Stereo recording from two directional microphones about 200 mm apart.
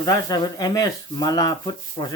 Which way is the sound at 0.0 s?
20° left (ahead or behind).